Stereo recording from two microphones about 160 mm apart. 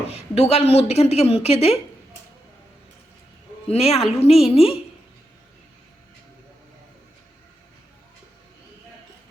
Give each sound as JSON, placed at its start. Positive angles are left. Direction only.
{"t": 0.1, "sound": "a woman's voice", "side_deg": 40}
{"t": 3.7, "sound": "a woman's voice", "side_deg": 40}